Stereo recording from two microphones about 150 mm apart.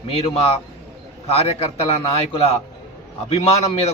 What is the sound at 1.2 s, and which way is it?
Speech, 40° left (ahead or behind).